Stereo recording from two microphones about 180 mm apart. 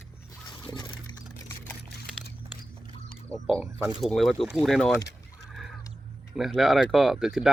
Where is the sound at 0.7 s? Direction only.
25° left (ahead or behind).